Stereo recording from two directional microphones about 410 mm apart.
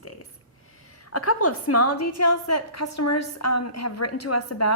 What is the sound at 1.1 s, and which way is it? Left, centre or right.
A woman's voice, left.